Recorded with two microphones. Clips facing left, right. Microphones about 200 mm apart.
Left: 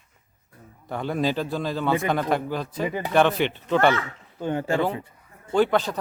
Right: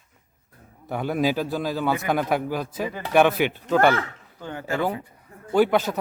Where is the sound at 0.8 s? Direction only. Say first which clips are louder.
Right 2 dB; 10° right (ahead or behind).